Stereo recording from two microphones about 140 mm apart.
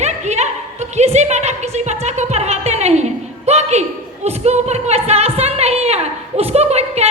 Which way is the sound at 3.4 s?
50° right (ahead or behind).